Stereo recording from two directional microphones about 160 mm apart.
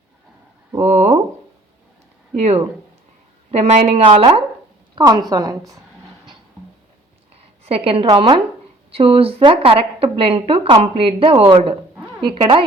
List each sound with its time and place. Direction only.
0.8 s speech: 45° right (ahead or behind)
2.3 s a woman's voice: 40° right (ahead or behind); by 5.7 s 20° right (ahead or behind)
7.6 s a woman's voice: 35° right (ahead or behind)